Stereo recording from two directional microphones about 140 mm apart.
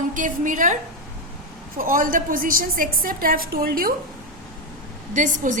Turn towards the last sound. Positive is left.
turn(degrees=-65)  # may be behind; listen again after turning